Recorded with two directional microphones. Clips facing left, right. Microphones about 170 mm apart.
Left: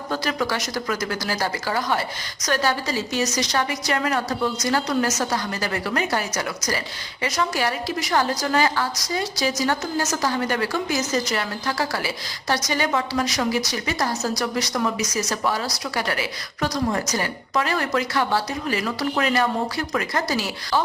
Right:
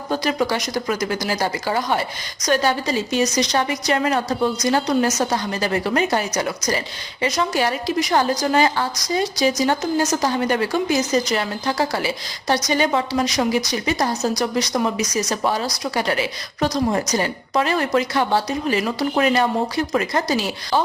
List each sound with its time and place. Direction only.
0.1 s a woman's voice: 20° right (ahead or behind)